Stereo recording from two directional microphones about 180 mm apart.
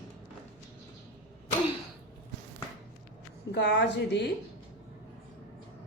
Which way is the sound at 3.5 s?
70° left (ahead or behind).